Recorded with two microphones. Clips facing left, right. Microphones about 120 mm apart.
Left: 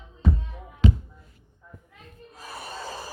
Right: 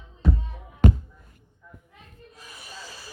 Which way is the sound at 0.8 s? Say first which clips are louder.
Right 2 dB; 55° right (ahead or behind).